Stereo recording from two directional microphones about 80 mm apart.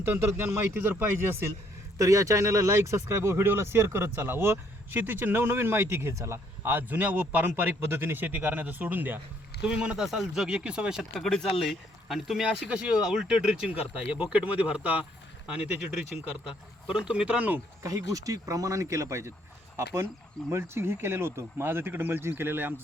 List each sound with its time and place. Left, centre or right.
0.0 s speech: right
2.0 s speech: right
9.6 s speech: centre
11.2 s speech: centre
17.8 s speech: right